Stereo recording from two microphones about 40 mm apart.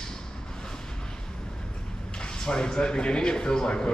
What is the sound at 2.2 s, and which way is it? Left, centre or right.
Speech, left.